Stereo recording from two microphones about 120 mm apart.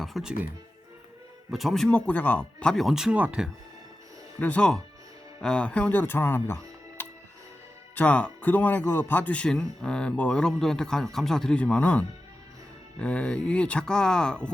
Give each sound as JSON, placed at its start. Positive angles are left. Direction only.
{"t": 0.0, "sound": "speech", "side_deg": 0}
{"t": 1.5, "sound": "speech", "side_deg": 0}
{"t": 2.0, "sound": "speech", "side_deg": 15}
{"t": 4.4, "sound": "speech", "side_deg": 15}